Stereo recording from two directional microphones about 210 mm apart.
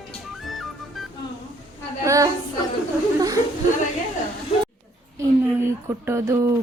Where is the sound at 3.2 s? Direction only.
15° right (ahead or behind).